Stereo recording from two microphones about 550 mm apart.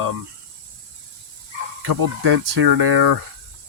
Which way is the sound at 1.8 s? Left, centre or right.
Right.